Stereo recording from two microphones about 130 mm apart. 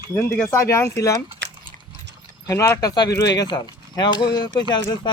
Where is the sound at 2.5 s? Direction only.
25° left (ahead or behind).